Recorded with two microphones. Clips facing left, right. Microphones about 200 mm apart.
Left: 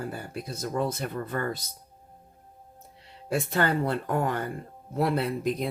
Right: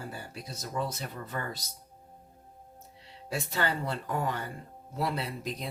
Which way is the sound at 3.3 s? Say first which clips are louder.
Left 6 dB; 55° left (ahead or behind).